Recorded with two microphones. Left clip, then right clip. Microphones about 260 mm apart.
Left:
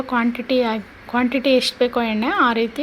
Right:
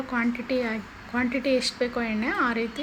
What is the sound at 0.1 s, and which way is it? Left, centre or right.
Speech, left.